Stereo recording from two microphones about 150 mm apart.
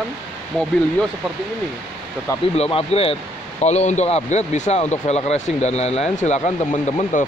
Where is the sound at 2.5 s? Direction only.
45° left (ahead or behind).